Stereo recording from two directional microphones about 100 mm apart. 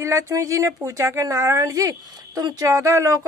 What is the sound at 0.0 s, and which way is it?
A woman's voice, 35° right (ahead or behind).